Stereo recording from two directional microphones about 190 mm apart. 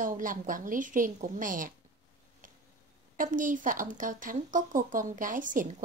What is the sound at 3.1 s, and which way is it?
A woman's voice, 45° right (ahead or behind).